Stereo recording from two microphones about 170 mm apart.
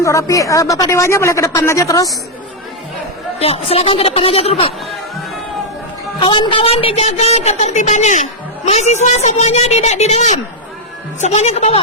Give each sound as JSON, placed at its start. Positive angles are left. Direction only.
{"t": 0.0, "sound": "speech", "side_deg": 20}
{"t": 3.4, "sound": "a woman's voice", "side_deg": 35}
{"t": 6.1, "sound": "a woman's voice", "side_deg": 30}